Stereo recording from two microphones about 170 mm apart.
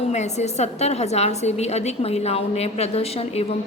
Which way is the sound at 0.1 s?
40° left (ahead or behind).